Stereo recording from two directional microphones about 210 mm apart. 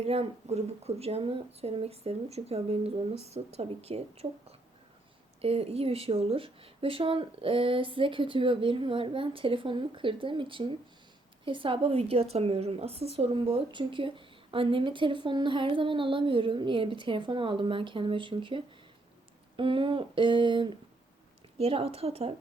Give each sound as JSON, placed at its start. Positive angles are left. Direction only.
{"t": 0.0, "sound": "speech", "side_deg": -30}